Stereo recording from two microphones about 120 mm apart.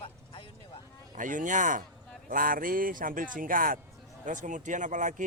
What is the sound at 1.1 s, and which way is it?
Speech, 90° right.